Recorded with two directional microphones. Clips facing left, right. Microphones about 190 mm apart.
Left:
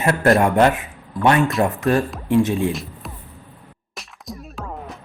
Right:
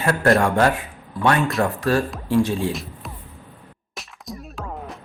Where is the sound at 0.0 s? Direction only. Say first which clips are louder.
Left 2 dB; 20° left (ahead or behind).